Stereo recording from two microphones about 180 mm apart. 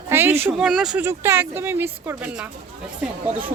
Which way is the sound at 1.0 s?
15° right (ahead or behind).